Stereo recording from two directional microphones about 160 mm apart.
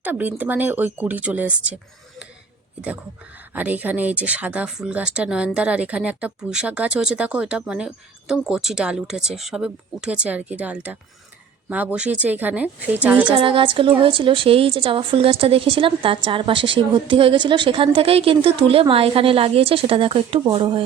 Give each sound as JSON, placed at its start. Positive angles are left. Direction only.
{"t": 0.0, "sound": "speech", "side_deg": -10}
{"t": 3.5, "sound": "speech", "side_deg": -10}
{"t": 13.3, "sound": "a woman's voice", "side_deg": -35}